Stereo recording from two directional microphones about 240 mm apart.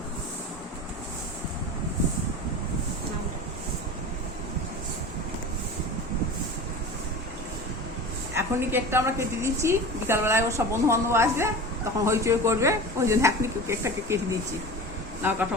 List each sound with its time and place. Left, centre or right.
8.4 s a woman's voice: centre